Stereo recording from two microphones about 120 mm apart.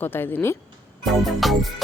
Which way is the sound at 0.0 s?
15° left (ahead or behind).